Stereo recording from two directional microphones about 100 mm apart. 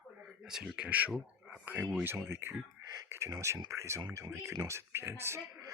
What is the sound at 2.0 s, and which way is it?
Speech, 20° right (ahead or behind).